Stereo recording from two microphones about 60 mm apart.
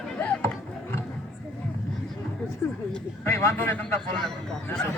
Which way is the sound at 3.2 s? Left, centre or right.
Left.